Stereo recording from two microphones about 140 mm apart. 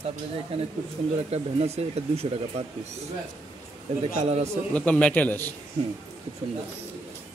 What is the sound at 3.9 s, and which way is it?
Speech, 50° right (ahead or behind).